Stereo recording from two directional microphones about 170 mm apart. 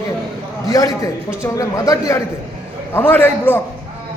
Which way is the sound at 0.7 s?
20° left (ahead or behind).